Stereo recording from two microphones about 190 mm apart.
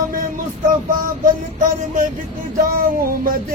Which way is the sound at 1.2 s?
45° right (ahead or behind).